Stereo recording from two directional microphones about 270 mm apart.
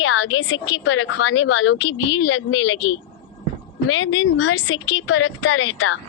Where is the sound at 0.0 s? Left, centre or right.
Left.